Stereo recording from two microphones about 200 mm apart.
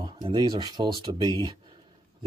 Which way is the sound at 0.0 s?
20° right (ahead or behind).